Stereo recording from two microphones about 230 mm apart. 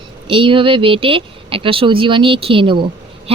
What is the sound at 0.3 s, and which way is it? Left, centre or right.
Speech, right.